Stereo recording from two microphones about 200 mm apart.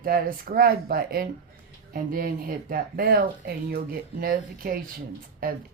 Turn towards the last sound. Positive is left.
turn(degrees=-45)  # may be behind; listen again after turning